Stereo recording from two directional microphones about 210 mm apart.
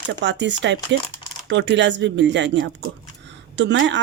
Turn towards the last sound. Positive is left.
turn(degrees=-60)  # may be behind; listen again after turning